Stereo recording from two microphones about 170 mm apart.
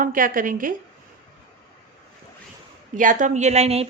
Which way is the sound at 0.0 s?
55° right (ahead or behind).